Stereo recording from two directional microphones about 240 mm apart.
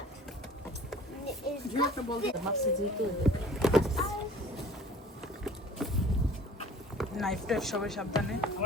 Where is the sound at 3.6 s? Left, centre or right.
Centre.